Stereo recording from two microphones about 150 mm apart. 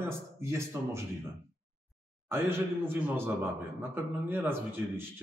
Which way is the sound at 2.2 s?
15° right (ahead or behind).